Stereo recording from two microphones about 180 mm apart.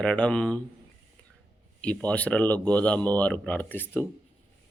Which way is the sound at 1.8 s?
5° left (ahead or behind).